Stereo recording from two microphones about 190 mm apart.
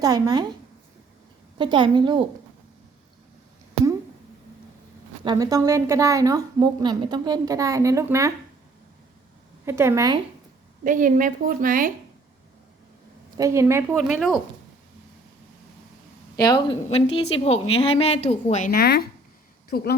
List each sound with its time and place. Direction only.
0.0 s a woman's voice: 20° right (ahead or behind)
1.5 s a woman's voice: 25° right (ahead or behind)
5.2 s a woman's voice: 20° right (ahead or behind)
9.6 s a woman's voice: 15° right (ahead or behind)
10.8 s a woman's voice: 45° right (ahead or behind)
13.3 s a woman's voice: 15° right (ahead or behind)
13.9 s speech: centre (ahead or behind)
16.4 s a woman's voice: 25° left (ahead or behind); by 20.0 s 55° left (ahead or behind)